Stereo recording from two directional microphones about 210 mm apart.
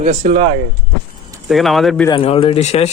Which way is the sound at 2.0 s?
25° left (ahead or behind).